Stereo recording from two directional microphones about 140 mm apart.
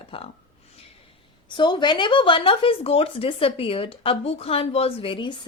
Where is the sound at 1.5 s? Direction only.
35° left (ahead or behind).